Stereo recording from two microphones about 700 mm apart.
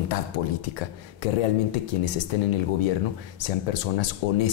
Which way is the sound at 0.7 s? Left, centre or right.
Left.